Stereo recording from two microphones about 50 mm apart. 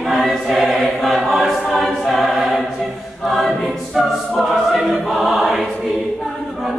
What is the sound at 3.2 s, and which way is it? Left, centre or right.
A capella, centre.